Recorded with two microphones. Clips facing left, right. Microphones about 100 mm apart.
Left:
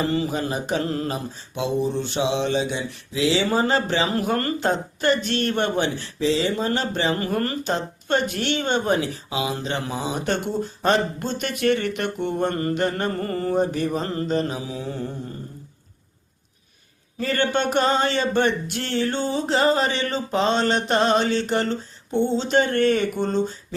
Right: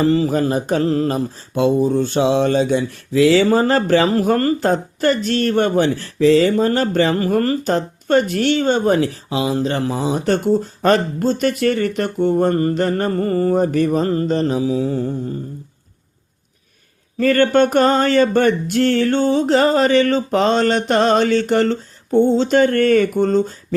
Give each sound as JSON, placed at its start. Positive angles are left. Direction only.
{"t": 0.0, "sound": "mantra", "side_deg": -40}
{"t": 7.3, "sound": "speech", "side_deg": -40}
{"t": 17.2, "sound": "mantra", "side_deg": -45}